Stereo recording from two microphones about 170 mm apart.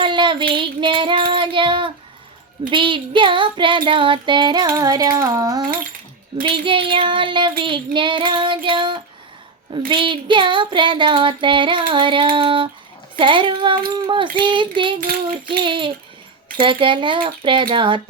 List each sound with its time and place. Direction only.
0.0 s child singing: 30° right (ahead or behind)